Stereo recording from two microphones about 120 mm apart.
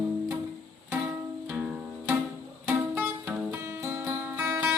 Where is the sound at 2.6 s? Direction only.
15° right (ahead or behind).